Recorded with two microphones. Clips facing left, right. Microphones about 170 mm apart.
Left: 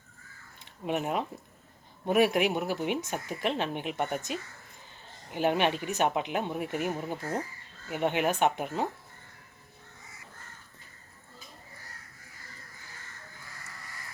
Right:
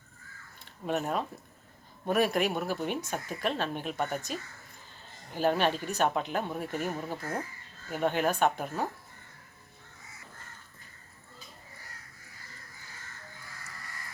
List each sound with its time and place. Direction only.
0.6 s crow: 15° left (ahead or behind)
2.0 s speech: 15° left (ahead or behind)